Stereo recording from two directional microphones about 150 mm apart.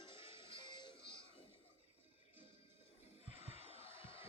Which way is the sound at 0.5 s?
30° left (ahead or behind).